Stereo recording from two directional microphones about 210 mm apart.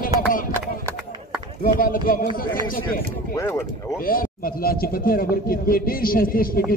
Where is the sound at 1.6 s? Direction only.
45° left (ahead or behind).